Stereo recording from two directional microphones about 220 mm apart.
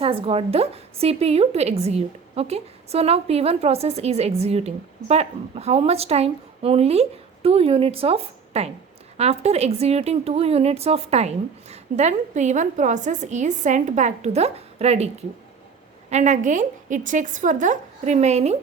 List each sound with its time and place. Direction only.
0.0 s a woman's voice: 25° right (ahead or behind)